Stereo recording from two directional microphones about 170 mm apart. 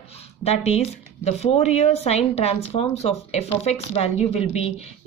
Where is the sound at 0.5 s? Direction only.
40° left (ahead or behind).